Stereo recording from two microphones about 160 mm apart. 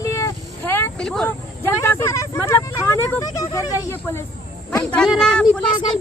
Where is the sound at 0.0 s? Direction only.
20° left (ahead or behind).